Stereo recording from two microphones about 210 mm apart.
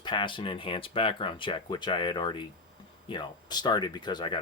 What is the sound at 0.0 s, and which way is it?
Speech, 20° left (ahead or behind).